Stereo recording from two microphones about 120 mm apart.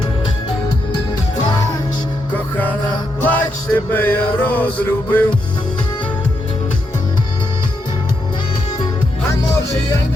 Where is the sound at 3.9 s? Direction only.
15° left (ahead or behind).